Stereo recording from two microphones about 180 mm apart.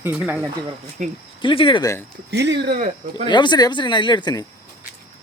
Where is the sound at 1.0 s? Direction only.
45° right (ahead or behind).